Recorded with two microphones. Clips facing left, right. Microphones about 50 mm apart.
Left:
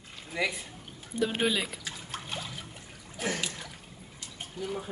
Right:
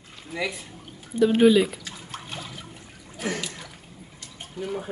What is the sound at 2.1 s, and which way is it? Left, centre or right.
Water, centre.